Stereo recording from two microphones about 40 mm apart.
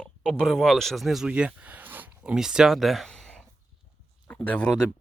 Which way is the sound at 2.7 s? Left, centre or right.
Centre.